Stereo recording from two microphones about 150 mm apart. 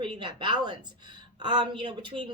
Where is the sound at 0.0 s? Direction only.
35° right (ahead or behind).